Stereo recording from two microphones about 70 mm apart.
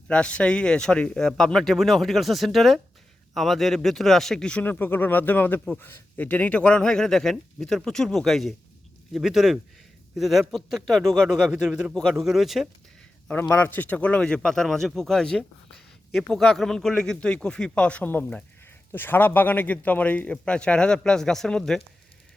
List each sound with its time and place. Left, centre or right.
0.1 s speech: centre
4.6 s a man's voice: left; by 11.3 s centre
11.5 s speech: centre
13.5 s a man's voice: left; by 21.8 s centre